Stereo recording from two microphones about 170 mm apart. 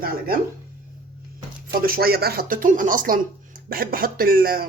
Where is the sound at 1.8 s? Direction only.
60° right (ahead or behind).